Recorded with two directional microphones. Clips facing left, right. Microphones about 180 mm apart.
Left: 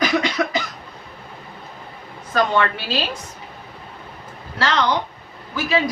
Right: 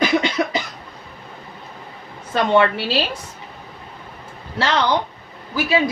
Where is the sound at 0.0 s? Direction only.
30° right (ahead or behind).